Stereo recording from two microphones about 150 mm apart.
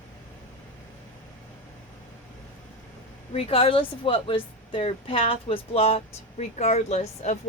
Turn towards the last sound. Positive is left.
turn(degrees=45)  # may be behind; listen again after turning